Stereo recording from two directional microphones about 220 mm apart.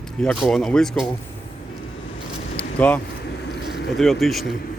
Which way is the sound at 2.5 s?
5° left (ahead or behind).